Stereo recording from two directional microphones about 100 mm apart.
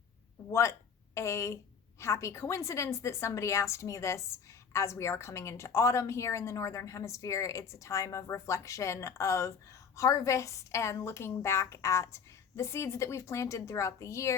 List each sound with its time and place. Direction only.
0.5 s a woman's voice: 30° left (ahead or behind)